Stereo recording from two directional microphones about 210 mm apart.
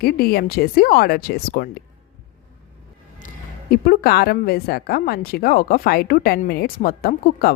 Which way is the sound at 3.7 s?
45° left (ahead or behind).